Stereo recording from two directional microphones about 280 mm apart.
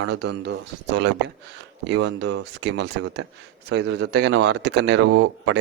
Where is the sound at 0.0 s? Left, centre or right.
Right.